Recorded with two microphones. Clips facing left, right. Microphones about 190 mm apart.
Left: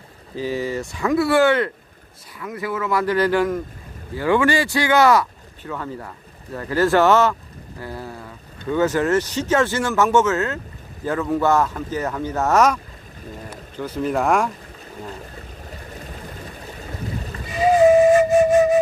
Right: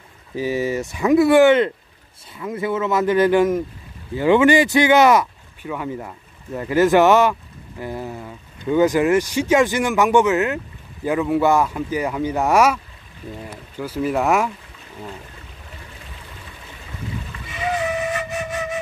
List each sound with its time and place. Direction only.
0.4 s speech: 15° right (ahead or behind)
15.7 s vehicle: 40° left (ahead or behind)
17.6 s flute: 25° left (ahead or behind)